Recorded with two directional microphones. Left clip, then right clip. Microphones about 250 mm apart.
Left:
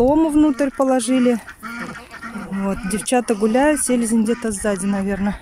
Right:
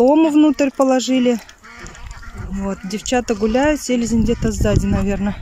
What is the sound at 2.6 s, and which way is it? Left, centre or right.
Speech, centre.